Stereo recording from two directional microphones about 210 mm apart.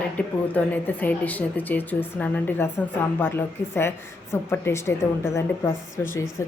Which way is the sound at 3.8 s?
10° left (ahead or behind).